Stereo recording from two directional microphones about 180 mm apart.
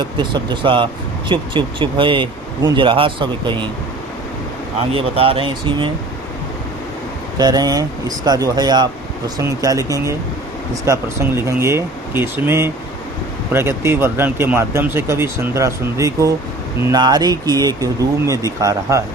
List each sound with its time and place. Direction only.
0.2 s speech: 25° right (ahead or behind)
4.9 s speech: 30° right (ahead or behind)
7.3 s speech: 20° right (ahead or behind)